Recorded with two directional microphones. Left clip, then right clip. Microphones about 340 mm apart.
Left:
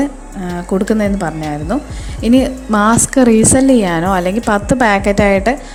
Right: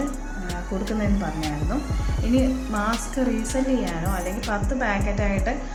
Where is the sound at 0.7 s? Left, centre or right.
Left.